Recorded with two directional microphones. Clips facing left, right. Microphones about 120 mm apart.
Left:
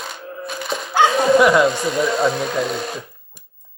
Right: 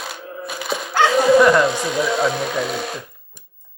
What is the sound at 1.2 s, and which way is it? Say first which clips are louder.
Bow-wow: right 3 dB; centre (ahead or behind).